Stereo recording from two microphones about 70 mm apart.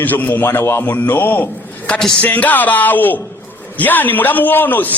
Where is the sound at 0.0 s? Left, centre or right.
Left.